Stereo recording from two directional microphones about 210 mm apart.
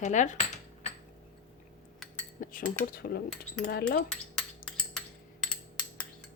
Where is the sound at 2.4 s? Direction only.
40° left (ahead or behind).